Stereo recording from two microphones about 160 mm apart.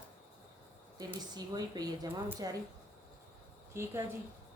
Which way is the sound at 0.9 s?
25° right (ahead or behind).